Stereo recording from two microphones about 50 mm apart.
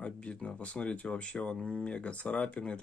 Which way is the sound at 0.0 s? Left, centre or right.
Left.